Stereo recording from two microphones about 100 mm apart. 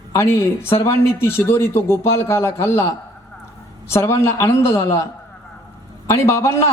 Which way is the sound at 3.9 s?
25° left (ahead or behind).